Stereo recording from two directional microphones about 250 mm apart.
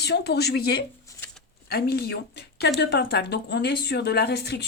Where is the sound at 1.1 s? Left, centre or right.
Centre.